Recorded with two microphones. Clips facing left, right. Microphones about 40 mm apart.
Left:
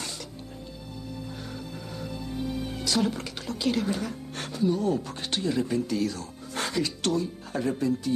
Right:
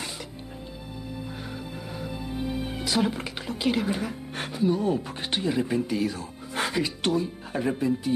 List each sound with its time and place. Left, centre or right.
2.0 s speech: centre